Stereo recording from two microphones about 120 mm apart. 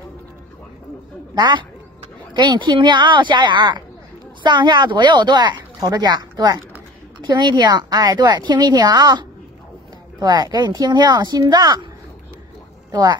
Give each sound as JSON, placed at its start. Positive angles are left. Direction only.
{"t": 1.3, "sound": "a man's voice", "side_deg": -40}
{"t": 12.9, "sound": "a woman's voice", "side_deg": -40}